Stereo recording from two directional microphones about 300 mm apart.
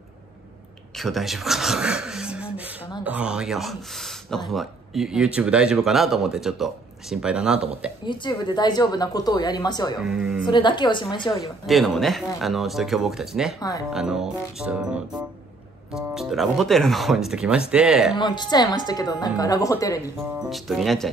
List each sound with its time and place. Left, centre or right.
0.9 s speech: centre
8.0 s a woman's voice: centre
10.0 s speech: centre
10.4 s a woman's voice: centre
11.6 s speech: centre
13.6 s a woman's voice: centre
13.9 s speech: centre
18.1 s a woman's voice: centre
20.3 s speech: centre